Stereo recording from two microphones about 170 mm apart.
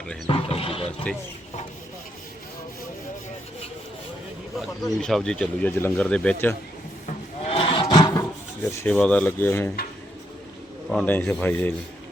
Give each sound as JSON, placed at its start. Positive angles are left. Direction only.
{"t": 0.3, "sound": "roaring cats", "side_deg": 35}
{"t": 1.1, "sound": "speech", "side_deg": 5}
{"t": 4.9, "sound": "speech", "side_deg": 5}
{"t": 7.1, "sound": "a sound", "side_deg": 35}
{"t": 8.8, "sound": "speech", "side_deg": 5}
{"t": 10.8, "sound": "speech", "side_deg": 5}